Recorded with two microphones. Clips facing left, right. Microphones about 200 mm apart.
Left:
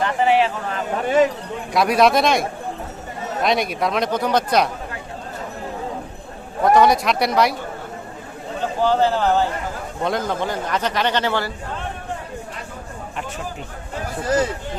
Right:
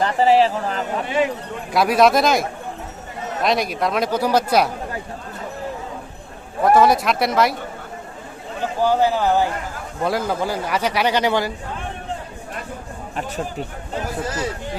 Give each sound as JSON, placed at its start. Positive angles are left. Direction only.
{"t": 0.0, "sound": "a man's voice", "side_deg": -35}
{"t": 1.0, "sound": "speech", "side_deg": 45}
{"t": 1.7, "sound": "speech", "side_deg": 0}
{"t": 6.6, "sound": "speech", "side_deg": 0}
{"t": 8.8, "sound": "a man's voice", "side_deg": -10}